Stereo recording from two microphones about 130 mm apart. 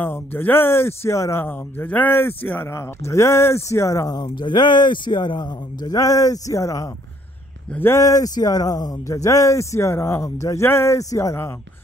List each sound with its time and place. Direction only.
0.0 s speech: 15° left (ahead or behind)